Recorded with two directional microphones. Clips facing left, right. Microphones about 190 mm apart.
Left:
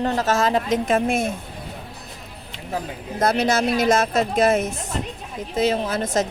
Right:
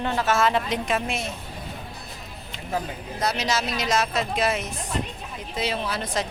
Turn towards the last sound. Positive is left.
turn(degrees=45)  # may be behind; listen again after turning